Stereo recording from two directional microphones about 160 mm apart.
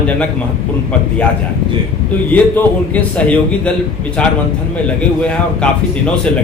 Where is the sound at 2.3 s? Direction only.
10° left (ahead or behind).